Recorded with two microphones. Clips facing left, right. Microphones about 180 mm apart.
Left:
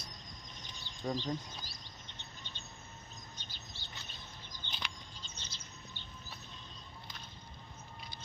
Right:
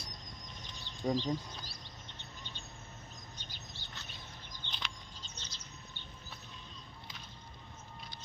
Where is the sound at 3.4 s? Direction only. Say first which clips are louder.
Right 1 dB; 15° right (ahead or behind).